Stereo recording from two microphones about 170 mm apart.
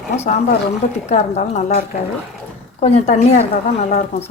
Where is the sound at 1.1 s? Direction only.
40° left (ahead or behind).